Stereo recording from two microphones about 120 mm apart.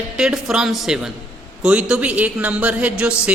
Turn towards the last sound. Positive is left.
turn(degrees=-10)  # may be behind; listen again after turning